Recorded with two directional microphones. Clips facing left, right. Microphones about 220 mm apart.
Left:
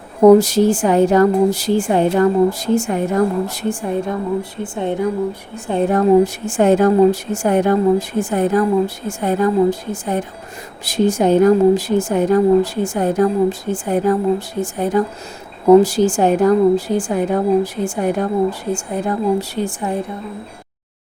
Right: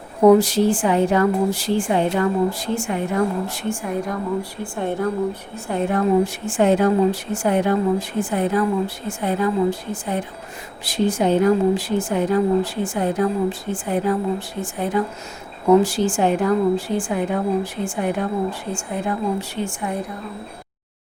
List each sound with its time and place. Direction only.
0.3 s speech: 45° left (ahead or behind); by 5.0 s 20° left (ahead or behind)
5.9 s speech: 40° left (ahead or behind)